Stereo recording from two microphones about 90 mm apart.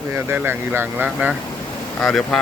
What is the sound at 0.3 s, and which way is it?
Speech, 25° right (ahead or behind).